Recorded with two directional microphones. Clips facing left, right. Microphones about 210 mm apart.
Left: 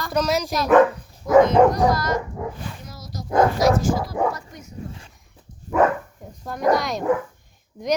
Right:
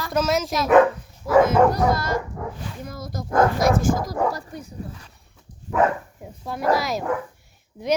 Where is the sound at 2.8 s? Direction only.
55° right (ahead or behind).